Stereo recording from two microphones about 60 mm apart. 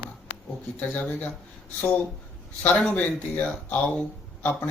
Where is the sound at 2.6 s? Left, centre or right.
Left.